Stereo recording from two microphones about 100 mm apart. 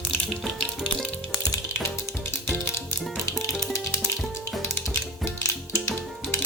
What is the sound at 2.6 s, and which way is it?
Music, 30° left (ahead or behind).